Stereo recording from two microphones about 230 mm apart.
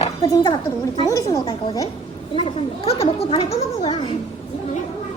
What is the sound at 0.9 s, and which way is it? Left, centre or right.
A woman's voice, centre.